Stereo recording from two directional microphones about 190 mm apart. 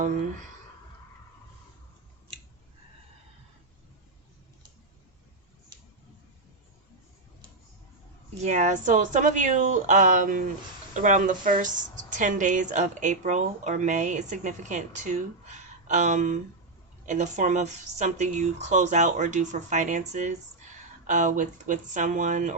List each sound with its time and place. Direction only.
8.4 s speech: 40° right (ahead or behind)